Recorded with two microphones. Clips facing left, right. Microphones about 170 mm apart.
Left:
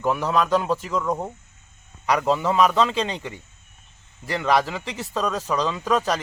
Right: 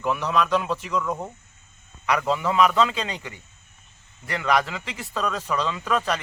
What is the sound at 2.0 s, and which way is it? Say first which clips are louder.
Speech: left 2 dB; 35° left (ahead or behind).